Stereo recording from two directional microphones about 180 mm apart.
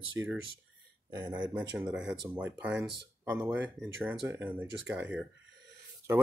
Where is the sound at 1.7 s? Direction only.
5° right (ahead or behind).